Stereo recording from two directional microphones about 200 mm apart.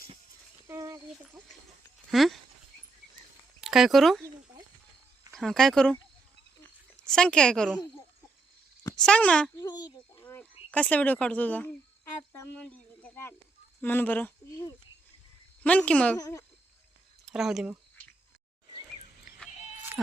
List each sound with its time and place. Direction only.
0.7 s a sound: 15° right (ahead or behind)
2.0 s speech: centre (ahead or behind)
3.6 s speech: centre (ahead or behind)
5.3 s speech: centre (ahead or behind)
6.6 s a sound: 5° left (ahead or behind)
9.0 s speech: 5° left (ahead or behind)
9.6 s a child's voice: 20° left (ahead or behind)
16.1 s speech: 20° left (ahead or behind)
17.2 s speech: centre (ahead or behind)